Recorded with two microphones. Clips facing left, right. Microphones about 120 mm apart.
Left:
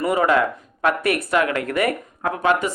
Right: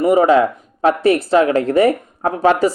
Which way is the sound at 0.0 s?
25° right (ahead or behind).